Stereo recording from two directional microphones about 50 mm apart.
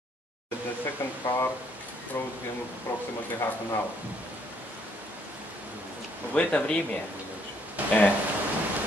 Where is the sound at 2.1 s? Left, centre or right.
Left.